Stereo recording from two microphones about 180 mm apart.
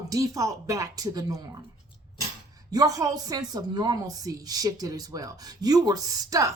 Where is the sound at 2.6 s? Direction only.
20° right (ahead or behind).